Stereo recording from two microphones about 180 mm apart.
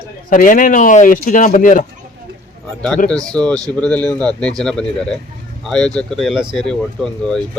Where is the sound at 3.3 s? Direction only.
5° left (ahead or behind).